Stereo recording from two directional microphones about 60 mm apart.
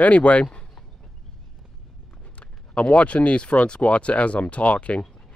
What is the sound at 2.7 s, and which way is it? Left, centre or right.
Speech, left.